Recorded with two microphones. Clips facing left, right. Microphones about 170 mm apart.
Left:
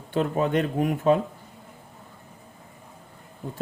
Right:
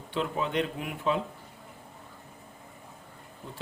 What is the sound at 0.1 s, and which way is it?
Speech, 45° left (ahead or behind).